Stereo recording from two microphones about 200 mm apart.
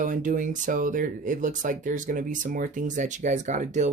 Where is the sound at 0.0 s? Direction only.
40° right (ahead or behind).